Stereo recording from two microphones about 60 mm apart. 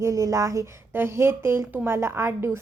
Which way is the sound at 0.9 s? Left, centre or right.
Right.